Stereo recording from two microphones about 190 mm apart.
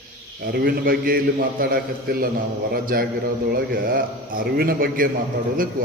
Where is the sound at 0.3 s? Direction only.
55° right (ahead or behind).